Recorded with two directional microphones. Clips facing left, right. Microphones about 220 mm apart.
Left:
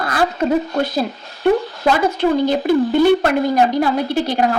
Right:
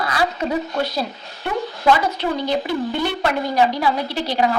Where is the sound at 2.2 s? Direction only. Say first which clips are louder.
Left 6 dB; 50° left (ahead or behind).